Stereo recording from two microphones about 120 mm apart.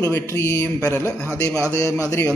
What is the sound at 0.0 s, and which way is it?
A man's voice, 20° left (ahead or behind).